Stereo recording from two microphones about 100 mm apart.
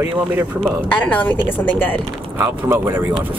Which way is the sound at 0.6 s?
15° left (ahead or behind).